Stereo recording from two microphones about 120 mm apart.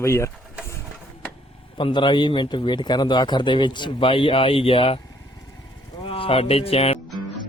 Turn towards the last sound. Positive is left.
turn(degrees=55)  # may be behind; listen again after turning